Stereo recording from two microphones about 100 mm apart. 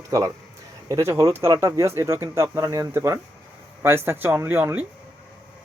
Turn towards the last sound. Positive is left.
turn(degrees=-20)  # may be behind; listen again after turning